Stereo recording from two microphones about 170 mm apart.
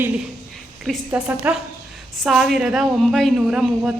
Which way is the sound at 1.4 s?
10° right (ahead or behind).